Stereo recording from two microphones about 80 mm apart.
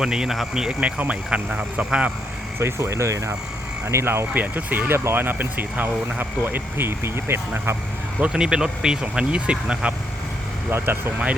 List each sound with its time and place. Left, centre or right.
0.0 s speech: centre
2.6 s speech: right
8.2 s speech: centre
10.7 s speech: right